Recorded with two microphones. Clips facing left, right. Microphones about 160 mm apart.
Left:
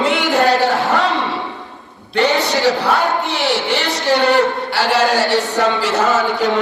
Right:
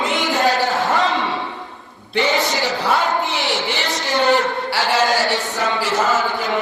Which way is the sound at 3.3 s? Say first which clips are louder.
Left 4 dB; 65° left (ahead or behind).